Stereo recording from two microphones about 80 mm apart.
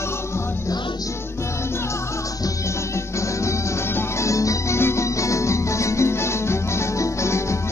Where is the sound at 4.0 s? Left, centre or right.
Left.